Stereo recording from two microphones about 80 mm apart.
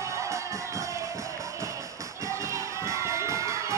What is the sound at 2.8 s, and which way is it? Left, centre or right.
Crowd, right.